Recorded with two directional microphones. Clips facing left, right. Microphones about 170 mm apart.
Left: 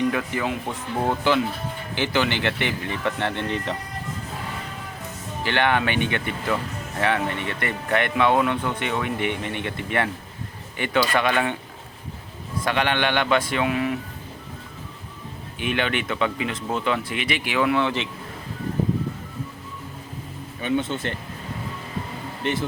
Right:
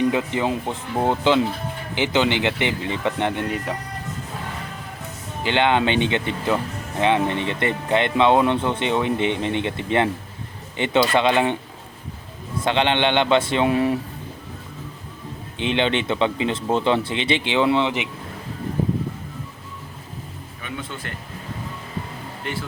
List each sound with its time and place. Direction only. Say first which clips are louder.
0.1 s speech: right 3 dB; 20° right (ahead or behind)
5.4 s speech: right 3 dB; 20° right (ahead or behind)
12.6 s speech: right 3 dB; 25° right (ahead or behind)
15.5 s speech: right 4 dB; 25° right (ahead or behind)
20.6 s speech: left 9 dB; 25° left (ahead or behind)
22.4 s speech: left 5 dB; 20° left (ahead or behind)